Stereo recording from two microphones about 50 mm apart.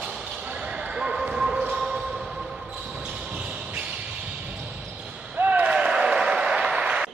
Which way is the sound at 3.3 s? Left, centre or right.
Right.